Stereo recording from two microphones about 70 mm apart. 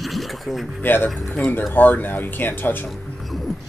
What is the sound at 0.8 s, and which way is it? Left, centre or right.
Speech, left.